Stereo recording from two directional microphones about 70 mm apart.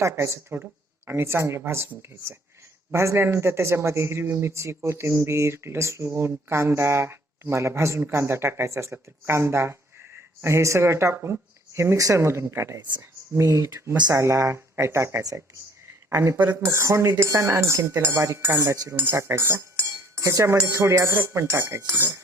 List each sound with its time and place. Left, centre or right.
0.0 s cutlery: right
0.5 s speech: right
2.9 s speech: right
14.1 s cutlery: right
16.0 s speech: right
16.4 s speech: right
16.6 s cutlery: right